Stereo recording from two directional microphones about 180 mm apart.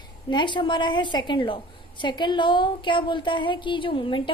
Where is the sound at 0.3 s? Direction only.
25° left (ahead or behind).